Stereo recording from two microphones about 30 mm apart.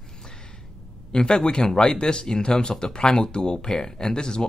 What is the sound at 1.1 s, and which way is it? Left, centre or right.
Speech, left.